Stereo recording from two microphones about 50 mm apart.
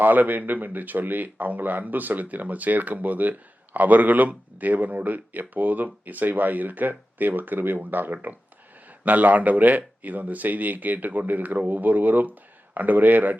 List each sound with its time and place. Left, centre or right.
0.0 s speech: right